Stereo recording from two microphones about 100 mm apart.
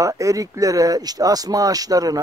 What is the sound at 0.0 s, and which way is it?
Speech, 35° right (ahead or behind).